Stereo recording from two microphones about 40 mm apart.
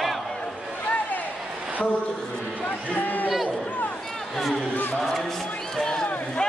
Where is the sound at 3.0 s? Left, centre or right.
Left.